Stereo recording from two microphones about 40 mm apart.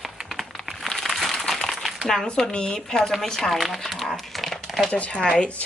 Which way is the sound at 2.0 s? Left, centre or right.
Centre.